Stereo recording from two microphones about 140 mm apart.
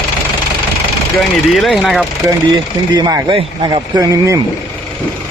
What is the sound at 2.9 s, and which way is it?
Speech, 30° right (ahead or behind).